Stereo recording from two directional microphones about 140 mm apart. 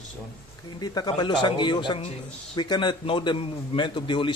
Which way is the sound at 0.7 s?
30° left (ahead or behind).